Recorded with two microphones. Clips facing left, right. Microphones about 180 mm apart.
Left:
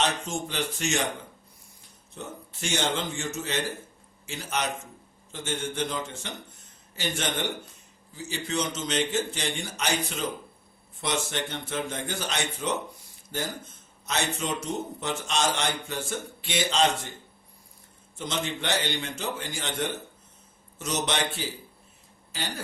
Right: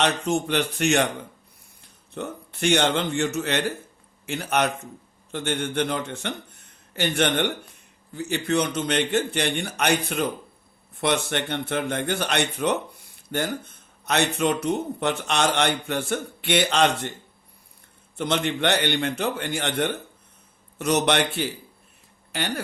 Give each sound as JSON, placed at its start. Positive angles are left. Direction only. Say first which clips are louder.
{"t": 0.0, "sound": "speech", "louder": "right 6 dB", "side_deg": -65}
{"t": 2.1, "sound": "speech", "louder": "right 7 dB", "side_deg": -65}
{"t": 18.2, "sound": "speech", "louder": "right 8 dB", "side_deg": -60}